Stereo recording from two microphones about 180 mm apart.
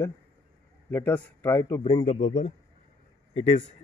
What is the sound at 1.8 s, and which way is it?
Speech, 25° left (ahead or behind).